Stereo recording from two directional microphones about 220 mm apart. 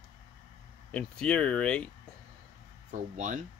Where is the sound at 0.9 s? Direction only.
5° left (ahead or behind).